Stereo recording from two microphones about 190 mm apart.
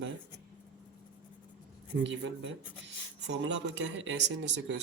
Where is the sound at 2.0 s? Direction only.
70° right (ahead or behind).